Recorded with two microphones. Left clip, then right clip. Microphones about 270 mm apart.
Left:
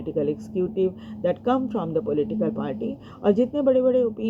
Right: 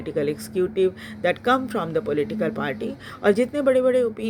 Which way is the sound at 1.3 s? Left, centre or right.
Right.